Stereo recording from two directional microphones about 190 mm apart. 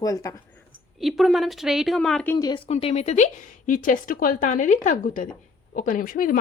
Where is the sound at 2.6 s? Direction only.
35° left (ahead or behind).